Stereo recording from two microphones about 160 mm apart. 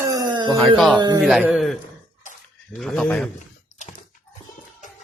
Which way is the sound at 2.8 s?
5° left (ahead or behind).